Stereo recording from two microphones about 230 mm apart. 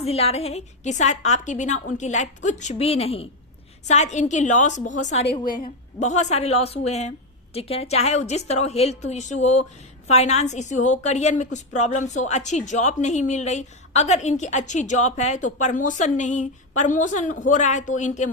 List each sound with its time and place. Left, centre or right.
0.0 s a woman's voice: left
5.4 s a woman's voice: left